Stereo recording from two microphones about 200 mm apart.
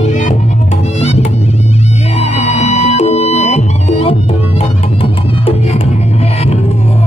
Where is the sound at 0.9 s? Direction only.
30° left (ahead or behind).